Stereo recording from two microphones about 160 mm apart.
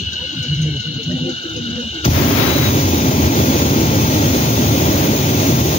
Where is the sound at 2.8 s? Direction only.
45° left (ahead or behind).